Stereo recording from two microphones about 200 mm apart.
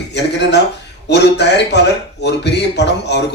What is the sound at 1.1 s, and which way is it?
Speech, 60° left (ahead or behind).